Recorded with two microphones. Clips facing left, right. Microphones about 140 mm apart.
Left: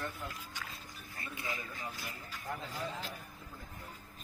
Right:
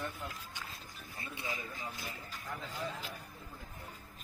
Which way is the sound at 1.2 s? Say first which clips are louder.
Even; 25° right (ahead or behind).